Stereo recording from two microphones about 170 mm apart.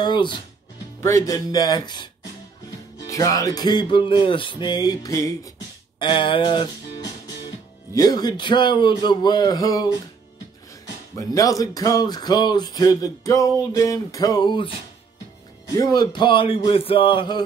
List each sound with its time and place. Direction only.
0.0 s speech: 25° left (ahead or behind)
3.1 s speech: 20° left (ahead or behind)
11.1 s speech: 20° left (ahead or behind)
15.7 s speech: 20° left (ahead or behind)